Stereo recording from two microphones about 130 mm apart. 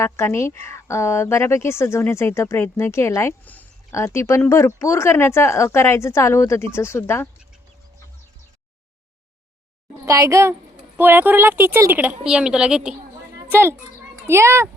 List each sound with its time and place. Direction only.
0.0 s speech: 20° left (ahead or behind)
10.1 s a woman's voice: 25° right (ahead or behind); by 13.0 s 5° right (ahead or behind)
13.5 s a woman's voice: 20° right (ahead or behind)